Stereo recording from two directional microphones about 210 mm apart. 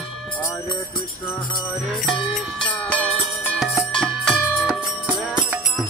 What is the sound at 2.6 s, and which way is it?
Music, 5° left (ahead or behind).